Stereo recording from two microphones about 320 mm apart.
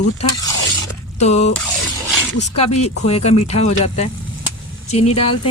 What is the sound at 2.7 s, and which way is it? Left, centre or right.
Speech, centre.